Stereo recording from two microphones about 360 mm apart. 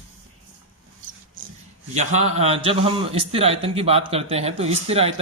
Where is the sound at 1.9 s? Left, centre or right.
Centre.